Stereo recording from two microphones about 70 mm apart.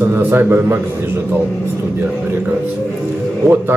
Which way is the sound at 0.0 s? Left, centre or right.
Right.